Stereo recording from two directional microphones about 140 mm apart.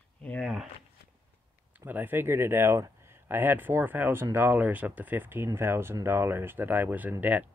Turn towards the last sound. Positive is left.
turn(degrees=-10)  # may be behind; listen again after turning